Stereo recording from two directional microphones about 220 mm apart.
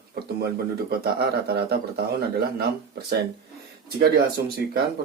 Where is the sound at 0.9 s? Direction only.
45° right (ahead or behind).